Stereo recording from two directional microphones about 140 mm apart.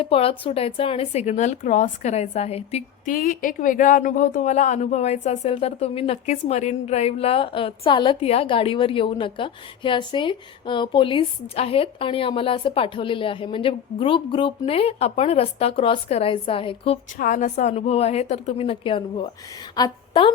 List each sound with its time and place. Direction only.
0.0 s speech: 45° left (ahead or behind)
3.1 s speech: 75° left (ahead or behind); by 6.3 s 45° left (ahead or behind)
6.3 s a woman's voice: 55° left (ahead or behind)
17.2 s a woman's voice: 65° left (ahead or behind); by 20.3 s 35° left (ahead or behind)